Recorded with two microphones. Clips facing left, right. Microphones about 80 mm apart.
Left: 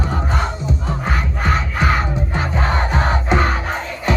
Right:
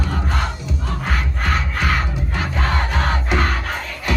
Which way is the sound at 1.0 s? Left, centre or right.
Centre.